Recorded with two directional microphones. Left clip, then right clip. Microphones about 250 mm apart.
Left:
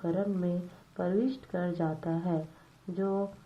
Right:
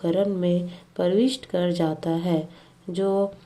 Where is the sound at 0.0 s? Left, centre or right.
Right.